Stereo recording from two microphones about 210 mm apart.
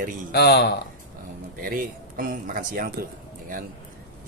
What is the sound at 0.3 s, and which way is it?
Speech, 55° left (ahead or behind).